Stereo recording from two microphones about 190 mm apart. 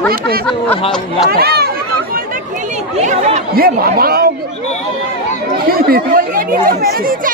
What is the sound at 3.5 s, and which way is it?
Speech, 50° right (ahead or behind).